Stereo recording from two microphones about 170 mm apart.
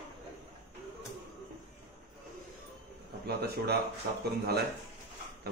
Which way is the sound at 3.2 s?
70° right (ahead or behind).